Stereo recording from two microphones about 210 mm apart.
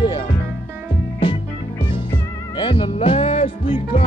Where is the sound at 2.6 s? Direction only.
25° left (ahead or behind).